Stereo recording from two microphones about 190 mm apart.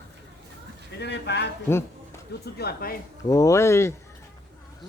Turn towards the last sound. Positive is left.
turn(degrees=15)  # may be behind; listen again after turning